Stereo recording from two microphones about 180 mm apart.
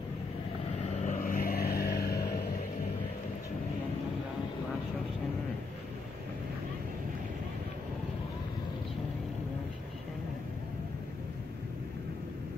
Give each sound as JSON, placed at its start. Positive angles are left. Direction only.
{"t": 1.0, "sound": "vehicle", "side_deg": 45}